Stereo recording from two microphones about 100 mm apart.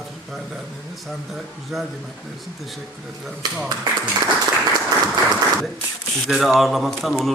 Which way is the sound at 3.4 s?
40° right (ahead or behind).